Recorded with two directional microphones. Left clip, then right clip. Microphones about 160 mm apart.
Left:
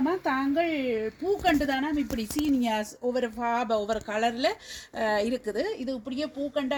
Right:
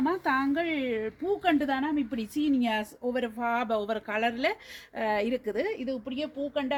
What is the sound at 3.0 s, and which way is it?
Speech, 25° left (ahead or behind).